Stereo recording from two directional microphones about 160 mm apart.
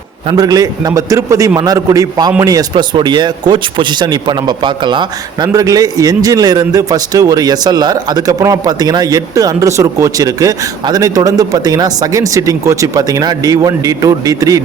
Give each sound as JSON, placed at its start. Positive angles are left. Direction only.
{"t": 0.3, "sound": "speech", "side_deg": -25}